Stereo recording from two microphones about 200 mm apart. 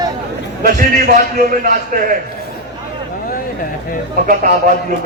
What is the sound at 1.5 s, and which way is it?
Speech, 45° right (ahead or behind).